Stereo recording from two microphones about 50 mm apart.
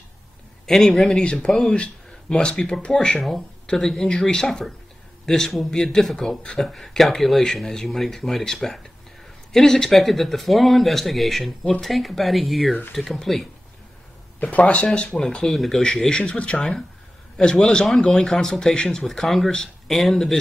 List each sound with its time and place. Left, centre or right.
0.7 s speech: centre
1.2 s speech: centre
1.5 s speech: centre
1.8 s speech: centre
3.2 s speech: centre
6.6 s speech: centre
14.5 s speech: left
15.0 s speech: centre
15.8 s speech: centre
16.5 s speech: centre